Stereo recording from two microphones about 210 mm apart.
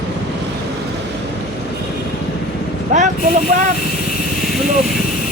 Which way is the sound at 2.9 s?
35° right (ahead or behind).